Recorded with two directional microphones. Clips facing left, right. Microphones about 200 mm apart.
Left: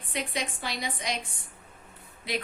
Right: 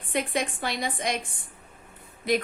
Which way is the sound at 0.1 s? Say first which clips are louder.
Right 5 dB; 50° right (ahead or behind).